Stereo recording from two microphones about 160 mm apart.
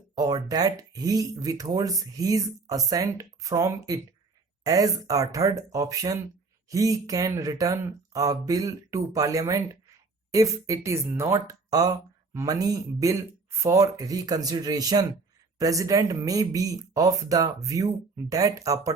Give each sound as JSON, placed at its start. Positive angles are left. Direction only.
{"t": 0.2, "sound": "speech", "side_deg": -25}